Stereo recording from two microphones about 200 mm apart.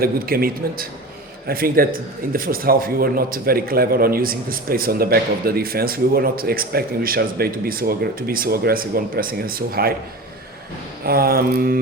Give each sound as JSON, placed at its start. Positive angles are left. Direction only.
{"t": 0.0, "sound": "a man's voice", "side_deg": -50}
{"t": 11.0, "sound": "a man's voice", "side_deg": -50}